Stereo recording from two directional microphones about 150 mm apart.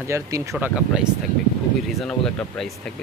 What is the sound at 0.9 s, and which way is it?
Speech, 5° right (ahead or behind).